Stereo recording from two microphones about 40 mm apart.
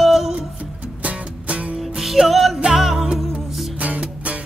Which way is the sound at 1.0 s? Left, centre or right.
Right.